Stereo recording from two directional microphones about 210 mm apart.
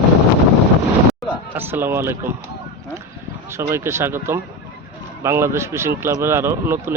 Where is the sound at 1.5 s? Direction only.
10° right (ahead or behind).